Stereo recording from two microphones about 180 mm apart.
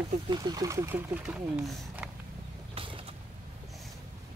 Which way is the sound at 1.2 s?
Centre (ahead or behind).